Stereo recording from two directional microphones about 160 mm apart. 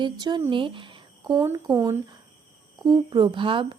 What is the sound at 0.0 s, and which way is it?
A woman's voice, 25° right (ahead or behind).